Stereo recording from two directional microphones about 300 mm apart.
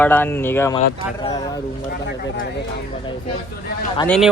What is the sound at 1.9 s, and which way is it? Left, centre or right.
Speech, left.